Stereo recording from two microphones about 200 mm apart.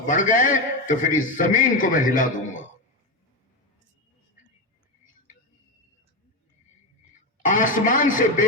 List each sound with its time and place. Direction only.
0.0 s a man's voice: 40° left (ahead or behind)
7.4 s a man's voice: 40° left (ahead or behind)